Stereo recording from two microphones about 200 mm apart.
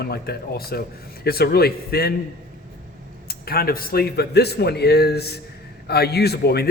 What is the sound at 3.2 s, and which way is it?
A man's voice, 50° left (ahead or behind).